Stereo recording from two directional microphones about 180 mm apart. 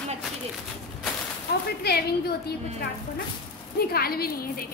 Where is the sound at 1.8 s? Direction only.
60° left (ahead or behind).